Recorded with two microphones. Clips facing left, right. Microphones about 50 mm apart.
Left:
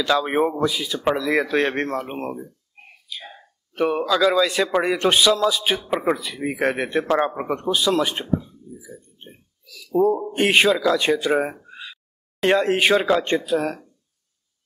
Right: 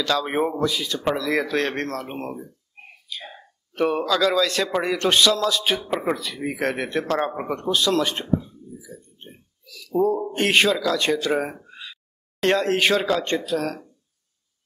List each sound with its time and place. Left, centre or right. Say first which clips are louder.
0.0 s speech: left 3 dB; centre
11.6 s a sound: left 2 dB; centre
13.5 s speech: left 3 dB; centre